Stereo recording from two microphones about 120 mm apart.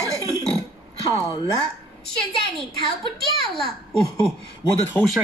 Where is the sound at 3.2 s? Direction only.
Centre (ahead or behind).